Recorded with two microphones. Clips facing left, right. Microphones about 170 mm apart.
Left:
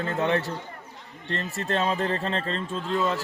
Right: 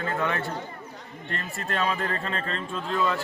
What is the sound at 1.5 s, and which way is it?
Speech, 35° left (ahead or behind).